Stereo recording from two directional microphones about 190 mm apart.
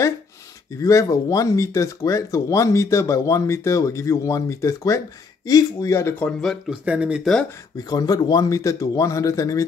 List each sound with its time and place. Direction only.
0.7 s speech: 15° left (ahead or behind); by 7.4 s centre (ahead or behind)
7.9 s speech: 20° left (ahead or behind)